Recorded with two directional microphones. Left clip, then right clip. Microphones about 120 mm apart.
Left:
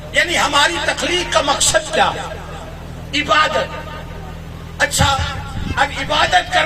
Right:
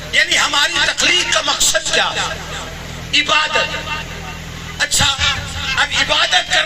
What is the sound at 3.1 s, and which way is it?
Speech, 35° left (ahead or behind).